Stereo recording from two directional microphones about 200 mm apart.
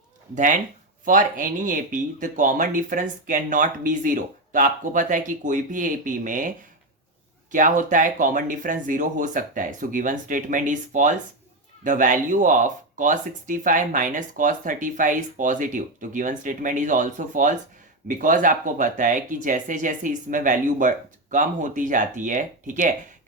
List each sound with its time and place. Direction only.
1.0 s speech: 40° right (ahead or behind)
7.5 s speech: 40° right (ahead or behind)